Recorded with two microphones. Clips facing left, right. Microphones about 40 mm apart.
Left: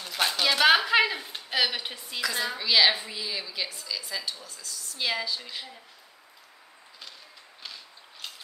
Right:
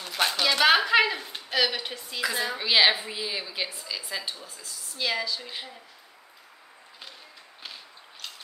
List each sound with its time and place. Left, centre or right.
0.0 s a sound: centre
2.3 s a woman's voice: centre
4.9 s speech: centre